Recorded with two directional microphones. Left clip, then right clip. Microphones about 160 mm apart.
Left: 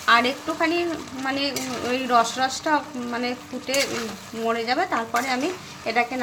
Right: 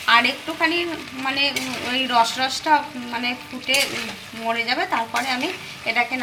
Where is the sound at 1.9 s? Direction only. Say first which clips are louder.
Right 2 dB; 40° left (ahead or behind).